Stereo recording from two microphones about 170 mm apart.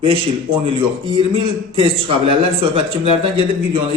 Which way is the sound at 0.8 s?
30° right (ahead or behind).